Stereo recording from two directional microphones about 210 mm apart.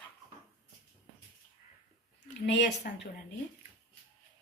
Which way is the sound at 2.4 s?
55° left (ahead or behind).